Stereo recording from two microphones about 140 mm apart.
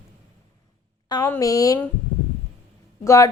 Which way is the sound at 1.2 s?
20° left (ahead or behind).